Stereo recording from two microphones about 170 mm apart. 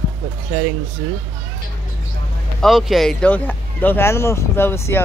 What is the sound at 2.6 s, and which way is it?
Speech, centre (ahead or behind).